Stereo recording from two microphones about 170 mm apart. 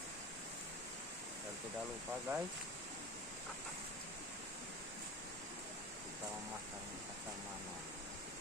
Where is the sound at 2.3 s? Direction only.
10° right (ahead or behind).